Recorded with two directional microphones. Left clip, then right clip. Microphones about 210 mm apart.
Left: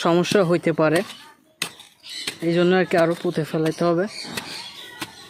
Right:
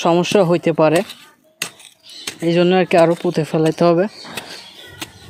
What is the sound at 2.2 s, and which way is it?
Speech, 15° right (ahead or behind).